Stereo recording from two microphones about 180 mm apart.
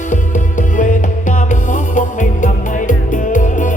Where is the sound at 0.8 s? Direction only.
45° left (ahead or behind).